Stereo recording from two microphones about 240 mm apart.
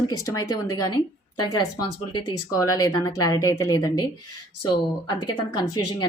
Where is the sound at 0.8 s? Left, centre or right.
Left.